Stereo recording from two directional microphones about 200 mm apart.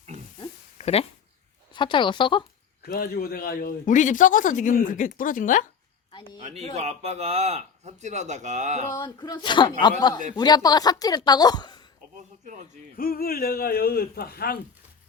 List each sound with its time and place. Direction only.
0.3 s pig: 30° left (ahead or behind)
1.7 s a woman's voice: 25° left (ahead or behind)
2.8 s a man's voice: 50° left (ahead or behind)
6.7 s speech: 30° right (ahead or behind)
9.0 s a woman's voice: 20° left (ahead or behind)
13.0 s speech: 45° left (ahead or behind)